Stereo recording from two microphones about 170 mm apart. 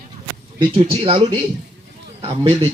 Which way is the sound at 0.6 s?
35° right (ahead or behind).